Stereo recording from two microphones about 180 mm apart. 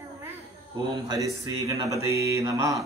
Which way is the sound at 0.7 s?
20° right (ahead or behind).